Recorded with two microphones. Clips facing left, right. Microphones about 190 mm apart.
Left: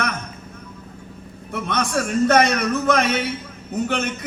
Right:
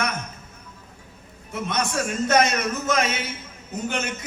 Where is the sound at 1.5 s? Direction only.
60° left (ahead or behind).